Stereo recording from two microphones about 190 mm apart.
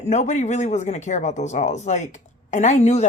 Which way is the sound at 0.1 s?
35° left (ahead or behind).